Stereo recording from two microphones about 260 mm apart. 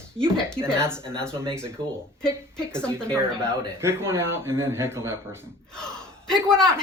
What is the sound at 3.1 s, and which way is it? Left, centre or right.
Speech, centre.